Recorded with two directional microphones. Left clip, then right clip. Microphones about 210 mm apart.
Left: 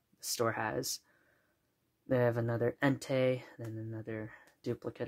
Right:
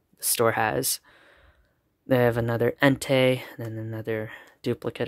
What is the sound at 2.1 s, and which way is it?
Speech, 40° right (ahead or behind).